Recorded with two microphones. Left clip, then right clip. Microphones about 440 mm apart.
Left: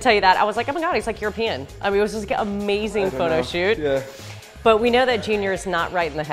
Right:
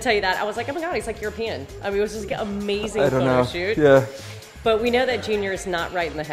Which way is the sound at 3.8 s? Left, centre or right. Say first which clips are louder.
Right 7 dB; right.